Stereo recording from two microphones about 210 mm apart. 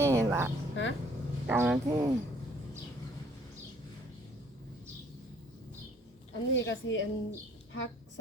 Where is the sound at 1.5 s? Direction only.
10° right (ahead or behind).